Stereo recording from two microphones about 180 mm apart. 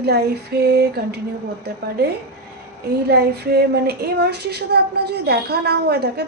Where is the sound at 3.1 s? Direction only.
65° right (ahead or behind).